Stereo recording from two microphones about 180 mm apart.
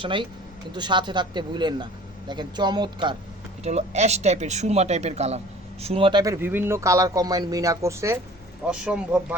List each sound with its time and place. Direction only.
0.0 s speech: 25° right (ahead or behind)
3.6 s speech: 40° right (ahead or behind); by 9.2 s 5° right (ahead or behind)